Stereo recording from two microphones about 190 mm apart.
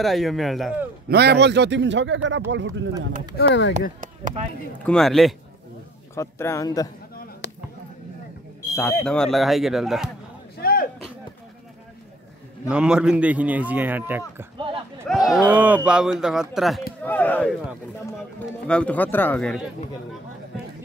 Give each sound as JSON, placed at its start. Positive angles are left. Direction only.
{"t": 0.0, "sound": "speech", "side_deg": 0}
{"t": 1.0, "sound": "a man's voice", "side_deg": -60}
{"t": 3.3, "sound": "speech", "side_deg": 65}
{"t": 4.0, "sound": "speech", "side_deg": -45}
{"t": 4.8, "sound": "speech", "side_deg": 0}
{"t": 6.1, "sound": "speech", "side_deg": 15}
{"t": 7.4, "sound": "a sound", "side_deg": 65}
{"t": 9.0, "sound": "speech", "side_deg": 5}
{"t": 10.6, "sound": "a sound", "side_deg": 50}
{"t": 12.6, "sound": "speech", "side_deg": -5}
{"t": 18.7, "sound": "speech", "side_deg": 5}